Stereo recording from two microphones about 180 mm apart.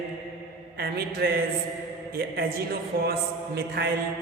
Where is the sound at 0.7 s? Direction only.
60° right (ahead or behind).